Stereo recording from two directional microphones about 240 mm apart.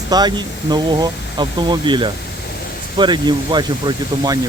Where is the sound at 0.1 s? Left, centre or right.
Centre.